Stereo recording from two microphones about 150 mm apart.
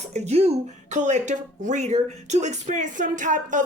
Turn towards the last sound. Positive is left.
turn(degrees=-60)  # may be behind; listen again after turning